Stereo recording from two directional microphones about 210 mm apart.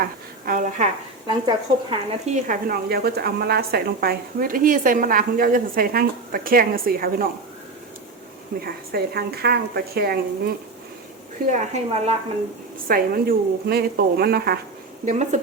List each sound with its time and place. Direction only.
0.4 s a woman's voice: 35° right (ahead or behind)
1.3 s a woman's voice: 20° right (ahead or behind); by 7.3 s 45° right (ahead or behind)
8.6 s a woman's voice: 45° right (ahead or behind)
11.4 s a woman's voice: 35° right (ahead or behind)
12.9 s a woman's voice: 45° right (ahead or behind)
15.0 s a woman's voice: 35° right (ahead or behind)